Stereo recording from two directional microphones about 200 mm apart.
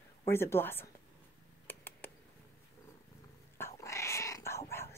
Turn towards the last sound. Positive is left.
turn(degrees=10)  # may be behind; listen again after turning